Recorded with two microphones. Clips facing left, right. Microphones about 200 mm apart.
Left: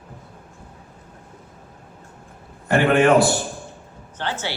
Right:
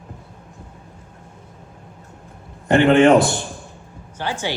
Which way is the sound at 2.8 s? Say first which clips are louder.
Right 4 dB; 25° right (ahead or behind).